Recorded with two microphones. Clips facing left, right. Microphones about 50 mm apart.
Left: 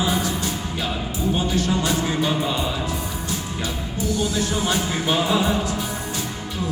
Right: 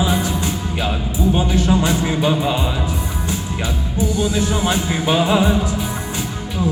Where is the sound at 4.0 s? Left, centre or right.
Right.